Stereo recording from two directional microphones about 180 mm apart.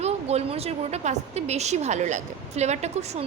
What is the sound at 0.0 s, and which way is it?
A woman's voice, 35° right (ahead or behind).